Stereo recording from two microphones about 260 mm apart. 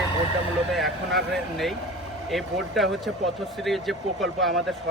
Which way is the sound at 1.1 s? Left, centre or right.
Centre.